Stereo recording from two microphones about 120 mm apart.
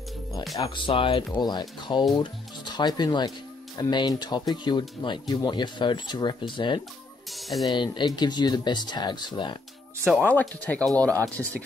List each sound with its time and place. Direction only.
0.7 s speech: 45° left (ahead or behind)
7.2 s speech: centre (ahead or behind)
7.6 s speech: 40° left (ahead or behind)
10.6 s speech: 15° left (ahead or behind)